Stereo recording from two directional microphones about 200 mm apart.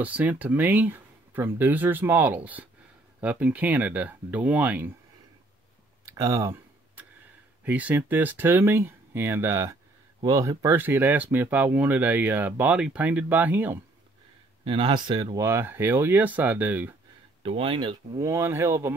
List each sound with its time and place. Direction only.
0.0 s speech: 10° right (ahead or behind)
6.0 s tick-tock: 15° right (ahead or behind)
7.6 s speech: 10° right (ahead or behind)
14.6 s speech: 25° right (ahead or behind); by 16.9 s 10° right (ahead or behind)
17.4 s speech: 30° right (ahead or behind)